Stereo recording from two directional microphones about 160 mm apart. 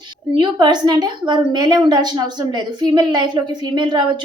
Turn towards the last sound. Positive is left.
turn(degrees=-30)  # may be behind; listen again after turning